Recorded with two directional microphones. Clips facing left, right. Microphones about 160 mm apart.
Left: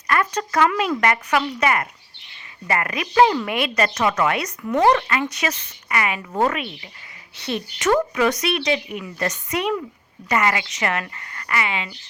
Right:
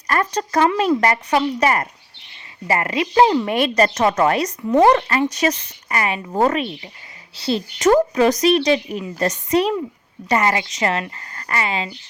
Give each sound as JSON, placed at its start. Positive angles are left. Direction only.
{"t": 0.1, "sound": "speech", "side_deg": -35}
{"t": 4.6, "sound": "speech", "side_deg": -20}
{"t": 4.9, "sound": "speech", "side_deg": -35}